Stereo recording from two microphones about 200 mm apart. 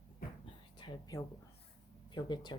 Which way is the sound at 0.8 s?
25° left (ahead or behind).